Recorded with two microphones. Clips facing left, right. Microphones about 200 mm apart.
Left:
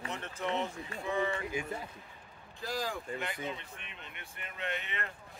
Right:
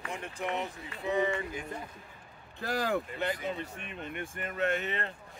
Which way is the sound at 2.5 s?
65° right (ahead or behind).